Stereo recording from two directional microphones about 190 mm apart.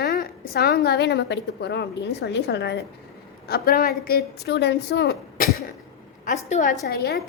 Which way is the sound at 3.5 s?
50° left (ahead or behind).